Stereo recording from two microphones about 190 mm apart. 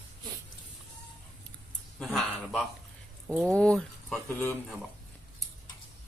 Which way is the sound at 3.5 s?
5° left (ahead or behind).